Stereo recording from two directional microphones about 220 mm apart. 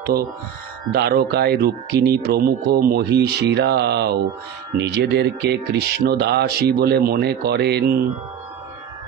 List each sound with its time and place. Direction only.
0.9 s speech: 45° right (ahead or behind)